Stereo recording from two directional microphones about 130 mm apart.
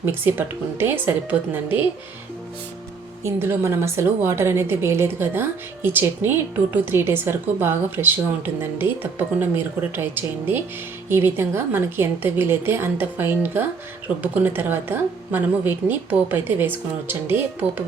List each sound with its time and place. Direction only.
0.0 s speech: 15° right (ahead or behind)
3.2 s speech: 15° right (ahead or behind)